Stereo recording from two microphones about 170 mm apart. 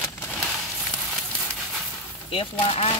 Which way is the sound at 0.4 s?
Centre (ahead or behind).